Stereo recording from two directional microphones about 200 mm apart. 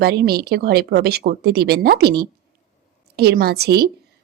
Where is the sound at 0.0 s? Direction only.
55° right (ahead or behind).